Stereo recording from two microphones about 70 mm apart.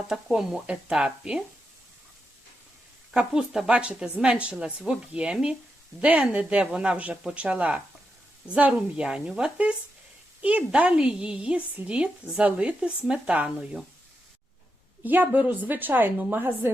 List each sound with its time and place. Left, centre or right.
0.1 s speech: centre
3.1 s speech: centre
10.4 s speech: centre
15.0 s a woman's voice: right